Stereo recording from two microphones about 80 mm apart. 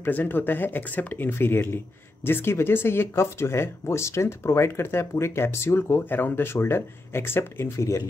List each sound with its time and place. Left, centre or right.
0.0 s speech: left